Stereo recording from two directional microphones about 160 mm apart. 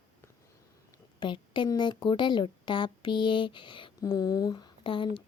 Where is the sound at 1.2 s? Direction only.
30° left (ahead or behind).